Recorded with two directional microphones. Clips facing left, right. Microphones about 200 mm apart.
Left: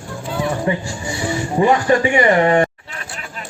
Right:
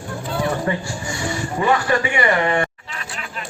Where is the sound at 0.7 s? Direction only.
20° left (ahead or behind).